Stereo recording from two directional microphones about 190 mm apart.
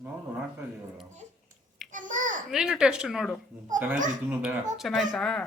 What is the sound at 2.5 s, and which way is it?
A woman's voice, 5° right (ahead or behind).